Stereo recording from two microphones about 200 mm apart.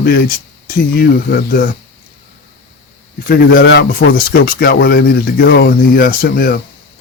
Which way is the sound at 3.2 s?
50° left (ahead or behind).